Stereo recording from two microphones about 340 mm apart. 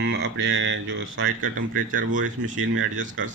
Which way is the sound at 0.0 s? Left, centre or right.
Right.